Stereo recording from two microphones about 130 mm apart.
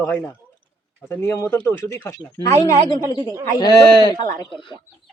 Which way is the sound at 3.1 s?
30° right (ahead or behind).